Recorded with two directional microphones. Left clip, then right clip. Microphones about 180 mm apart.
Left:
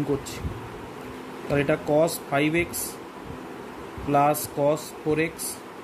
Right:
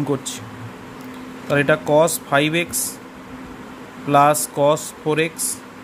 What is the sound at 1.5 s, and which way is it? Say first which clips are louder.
Speech: right 7 dB; 55° right (ahead or behind).